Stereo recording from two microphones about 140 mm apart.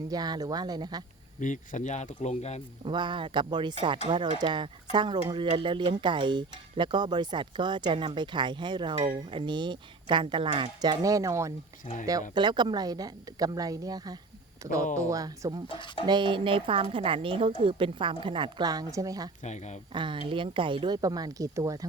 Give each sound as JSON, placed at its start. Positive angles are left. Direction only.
{"t": 0.1, "sound": "speech", "side_deg": -30}
{"t": 1.4, "sound": "speech", "side_deg": 65}
{"t": 2.8, "sound": "speech", "side_deg": -35}
{"t": 12.3, "sound": "speech", "side_deg": -35}
{"t": 19.5, "sound": "speech", "side_deg": 55}
{"t": 19.9, "sound": "speech", "side_deg": -35}